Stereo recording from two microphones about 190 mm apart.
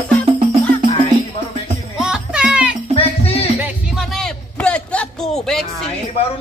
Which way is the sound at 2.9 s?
30° left (ahead or behind).